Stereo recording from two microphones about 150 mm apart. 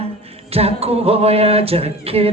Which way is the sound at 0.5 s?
45° right (ahead or behind).